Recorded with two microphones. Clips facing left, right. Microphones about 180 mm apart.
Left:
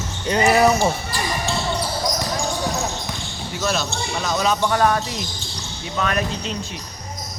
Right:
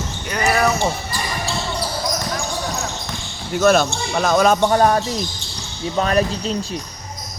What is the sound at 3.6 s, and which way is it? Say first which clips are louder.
Speech: right 9 dB; 55° right (ahead or behind).